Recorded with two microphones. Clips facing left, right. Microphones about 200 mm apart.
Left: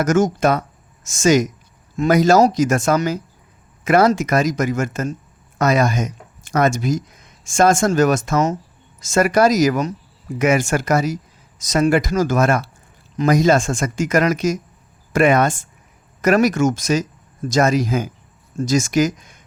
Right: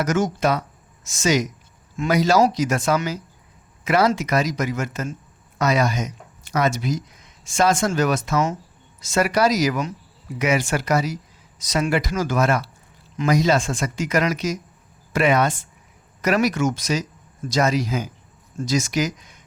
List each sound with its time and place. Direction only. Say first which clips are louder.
0.0 s speech: left 5 dB; 45° left (ahead or behind)